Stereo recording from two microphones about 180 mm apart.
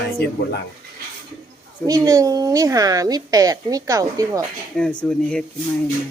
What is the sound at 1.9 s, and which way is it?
A woman's voice, 20° right (ahead or behind).